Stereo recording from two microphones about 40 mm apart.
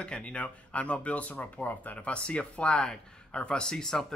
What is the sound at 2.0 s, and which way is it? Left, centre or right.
A man's voice, left.